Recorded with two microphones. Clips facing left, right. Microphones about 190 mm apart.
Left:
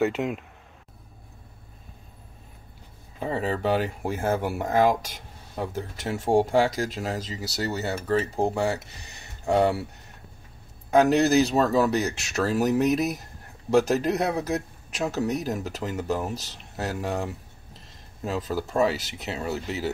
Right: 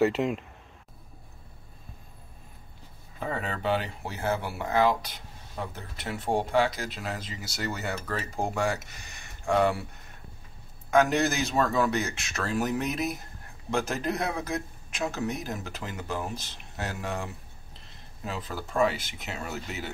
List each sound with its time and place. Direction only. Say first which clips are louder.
0.0 s speech: even; centre (ahead or behind)
3.2 s speech: left 5 dB; 30° left (ahead or behind)
10.9 s speech: left 4 dB; 35° left (ahead or behind)